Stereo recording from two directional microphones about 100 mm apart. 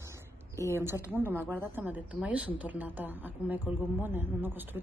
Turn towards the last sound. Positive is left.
turn(degrees=-20)  # may be behind; listen again after turning